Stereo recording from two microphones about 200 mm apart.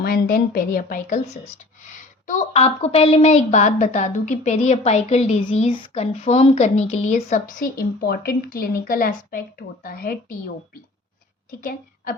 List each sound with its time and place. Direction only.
0.0 s a woman's voice: 50° left (ahead or behind)
11.6 s a woman's voice: 45° left (ahead or behind)